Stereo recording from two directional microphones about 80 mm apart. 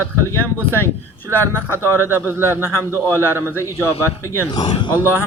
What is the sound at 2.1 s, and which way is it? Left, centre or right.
Speech, right.